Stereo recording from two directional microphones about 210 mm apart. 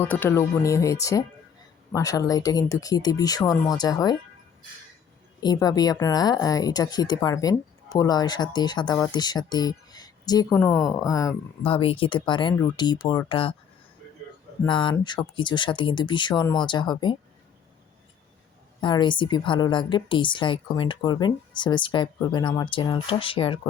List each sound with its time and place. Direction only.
0.0 s a woman's voice: 10° left (ahead or behind)
5.4 s a woman's voice: 20° left (ahead or behind)
14.7 s a woman's voice: 25° left (ahead or behind)
18.8 s a woman's voice: 20° left (ahead or behind)